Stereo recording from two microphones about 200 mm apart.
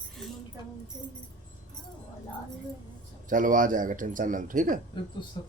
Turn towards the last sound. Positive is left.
turn(degrees=20)  # may be behind; listen again after turning